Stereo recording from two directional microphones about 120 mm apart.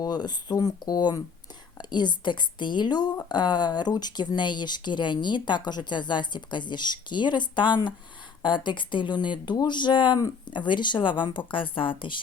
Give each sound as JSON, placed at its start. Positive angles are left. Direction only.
{"t": 0.0, "sound": "speech", "side_deg": 35}